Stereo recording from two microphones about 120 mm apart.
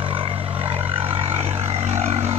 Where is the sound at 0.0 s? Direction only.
50° right (ahead or behind).